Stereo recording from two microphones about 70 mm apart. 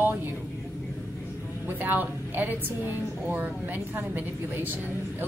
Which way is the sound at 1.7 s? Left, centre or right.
Right.